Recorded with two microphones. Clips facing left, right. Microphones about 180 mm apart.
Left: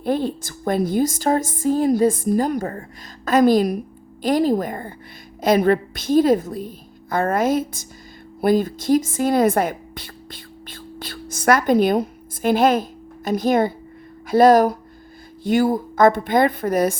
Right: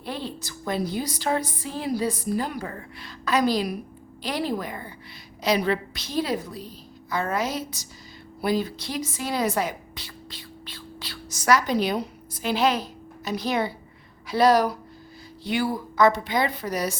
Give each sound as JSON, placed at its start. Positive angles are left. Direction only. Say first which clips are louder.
{"t": 0.0, "sound": "a woman's voice", "louder": "left 11 dB", "side_deg": 50}